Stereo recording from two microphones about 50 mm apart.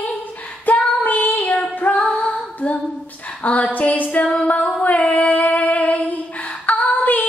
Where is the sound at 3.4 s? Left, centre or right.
Left.